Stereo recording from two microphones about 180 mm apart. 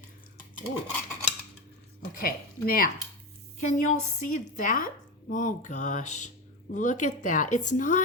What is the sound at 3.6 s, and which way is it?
A woman's voice, 45° left (ahead or behind).